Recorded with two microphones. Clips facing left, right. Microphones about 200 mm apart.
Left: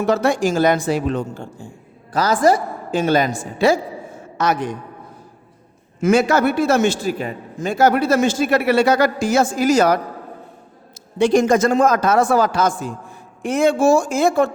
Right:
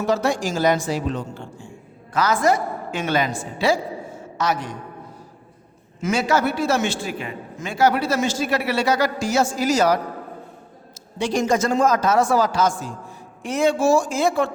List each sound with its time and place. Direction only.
0.0 s a man's voice: 55° left (ahead or behind)
4.4 s a man's voice: 55° left (ahead or behind)
6.0 s a man's voice: 55° left (ahead or behind)
11.2 s a man's voice: 55° left (ahead or behind)